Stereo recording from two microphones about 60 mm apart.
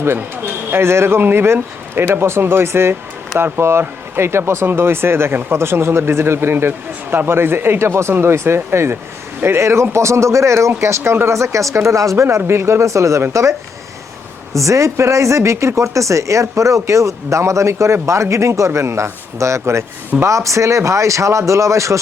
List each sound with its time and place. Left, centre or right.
0.0 s speech: right
14.5 s speech: right